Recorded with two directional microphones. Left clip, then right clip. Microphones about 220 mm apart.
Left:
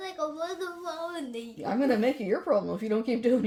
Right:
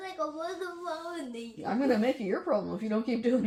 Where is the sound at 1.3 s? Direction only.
55° left (ahead or behind).